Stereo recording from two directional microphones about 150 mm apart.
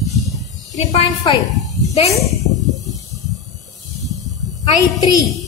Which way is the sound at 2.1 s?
Centre (ahead or behind).